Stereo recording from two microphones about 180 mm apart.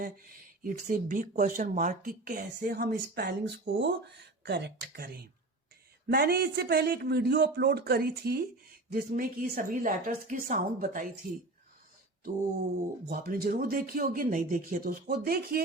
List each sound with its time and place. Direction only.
0.0 s a man's voice: 50° right (ahead or behind)
13.1 s speech: 55° right (ahead or behind)